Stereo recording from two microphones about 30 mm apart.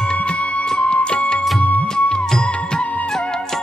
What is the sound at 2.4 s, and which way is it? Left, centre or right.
Music, left.